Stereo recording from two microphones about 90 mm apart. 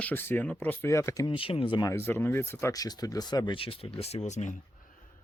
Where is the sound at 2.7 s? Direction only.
45° left (ahead or behind).